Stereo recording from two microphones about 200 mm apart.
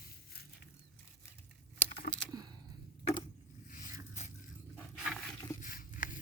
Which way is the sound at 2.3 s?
20° right (ahead or behind).